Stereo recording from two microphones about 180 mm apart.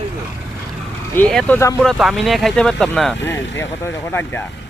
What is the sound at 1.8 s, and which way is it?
A man's voice, centre (ahead or behind).